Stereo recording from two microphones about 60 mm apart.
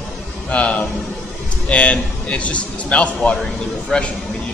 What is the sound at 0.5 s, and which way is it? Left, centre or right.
A man's voice, left.